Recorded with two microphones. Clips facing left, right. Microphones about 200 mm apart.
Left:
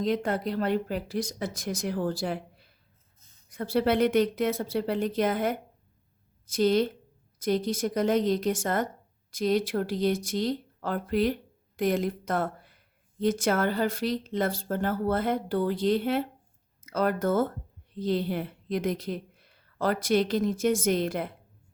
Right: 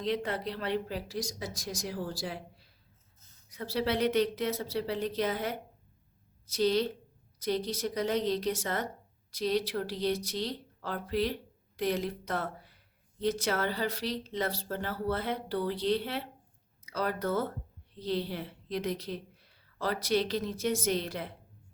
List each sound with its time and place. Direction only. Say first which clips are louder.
0.0 s a woman's voice: left 5 dB; 45° left (ahead or behind)